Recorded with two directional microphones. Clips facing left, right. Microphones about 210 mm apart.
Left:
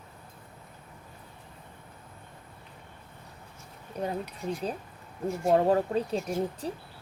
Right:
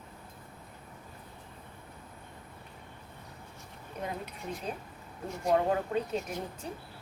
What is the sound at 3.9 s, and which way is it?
Speech, 35° left (ahead or behind).